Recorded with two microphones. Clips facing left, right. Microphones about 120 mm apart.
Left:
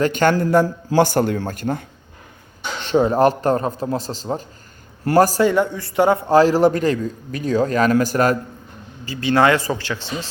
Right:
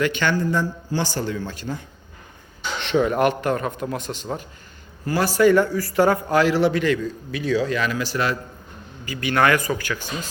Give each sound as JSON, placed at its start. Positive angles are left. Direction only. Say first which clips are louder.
{"t": 0.0, "sound": "speech", "louder": "left 5 dB", "side_deg": 45}
{"t": 0.3, "sound": "speech", "louder": "left 6 dB", "side_deg": 70}
{"t": 0.9, "sound": "speech", "louder": "left 9 dB", "side_deg": 55}
{"t": 2.8, "sound": "a man's voice", "louder": "left 4 dB", "side_deg": 35}
{"t": 5.1, "sound": "speech", "louder": "left 9 dB", "side_deg": 65}
{"t": 5.4, "sound": "a man's voice", "louder": "right 1 dB", "side_deg": 20}
{"t": 9.0, "sound": "speech", "louder": "left 4 dB", "side_deg": 25}